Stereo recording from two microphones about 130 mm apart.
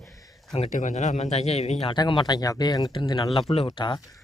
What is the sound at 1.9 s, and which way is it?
Speech, 40° left (ahead or behind).